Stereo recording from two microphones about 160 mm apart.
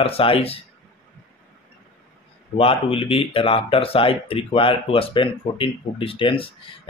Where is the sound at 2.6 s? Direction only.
35° left (ahead or behind).